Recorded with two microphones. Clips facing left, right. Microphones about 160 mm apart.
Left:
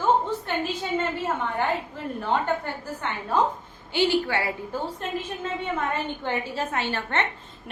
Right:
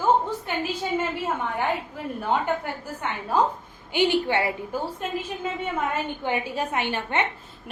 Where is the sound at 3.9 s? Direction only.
20° right (ahead or behind).